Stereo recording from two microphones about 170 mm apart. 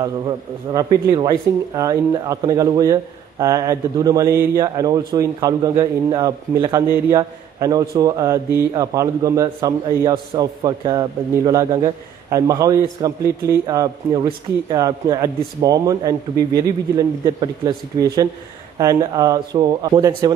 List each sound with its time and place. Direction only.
0.7 s speech: 25° right (ahead or behind)